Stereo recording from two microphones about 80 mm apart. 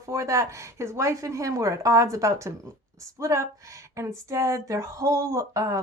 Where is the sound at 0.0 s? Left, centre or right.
Right.